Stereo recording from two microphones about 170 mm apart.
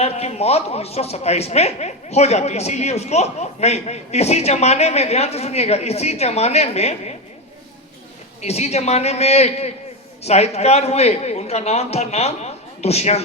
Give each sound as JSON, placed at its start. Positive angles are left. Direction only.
{"t": 0.0, "sound": "a woman's voice", "side_deg": 40}
{"t": 8.4, "sound": "a woman's voice", "side_deg": 40}